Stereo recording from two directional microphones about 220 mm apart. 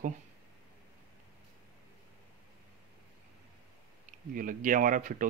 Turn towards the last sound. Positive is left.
turn(degrees=-35)  # may be behind; listen again after turning